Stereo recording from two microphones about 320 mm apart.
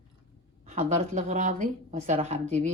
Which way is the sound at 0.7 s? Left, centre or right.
Right.